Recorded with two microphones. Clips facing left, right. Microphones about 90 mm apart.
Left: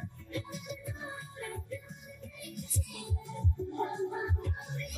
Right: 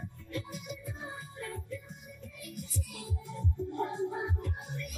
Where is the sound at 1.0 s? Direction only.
5° left (ahead or behind).